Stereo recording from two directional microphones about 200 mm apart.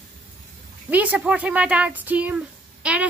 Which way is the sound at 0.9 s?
5° right (ahead or behind).